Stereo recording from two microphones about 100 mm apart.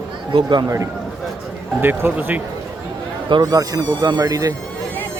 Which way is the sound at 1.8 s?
20° right (ahead or behind).